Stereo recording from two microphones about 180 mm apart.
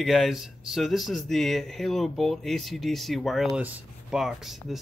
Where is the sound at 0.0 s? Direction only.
Centre (ahead or behind).